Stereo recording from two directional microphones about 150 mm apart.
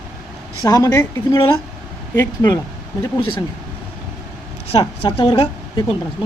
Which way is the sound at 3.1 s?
35° left (ahead or behind).